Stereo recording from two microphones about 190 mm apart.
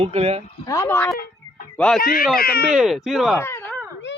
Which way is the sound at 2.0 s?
50° left (ahead or behind).